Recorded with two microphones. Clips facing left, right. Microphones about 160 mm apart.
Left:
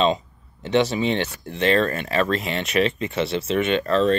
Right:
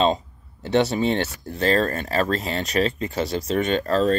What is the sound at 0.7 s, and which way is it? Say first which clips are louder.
Speech: even; 45° right (ahead or behind).